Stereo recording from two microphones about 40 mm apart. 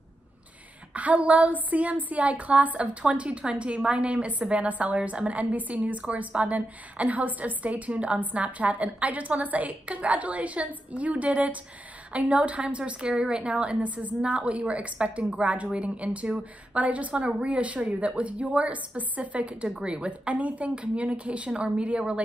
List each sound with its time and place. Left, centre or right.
0.9 s a woman's voice: right